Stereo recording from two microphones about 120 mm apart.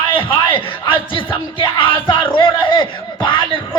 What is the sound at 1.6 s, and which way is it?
Music, 45° left (ahead or behind).